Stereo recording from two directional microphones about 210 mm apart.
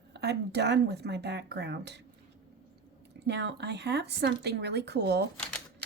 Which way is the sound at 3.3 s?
55° right (ahead or behind).